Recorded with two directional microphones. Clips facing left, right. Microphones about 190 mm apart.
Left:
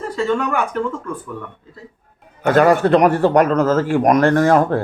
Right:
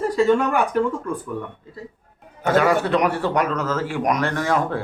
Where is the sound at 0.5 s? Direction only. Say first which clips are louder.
Right 1 dB; 15° right (ahead or behind).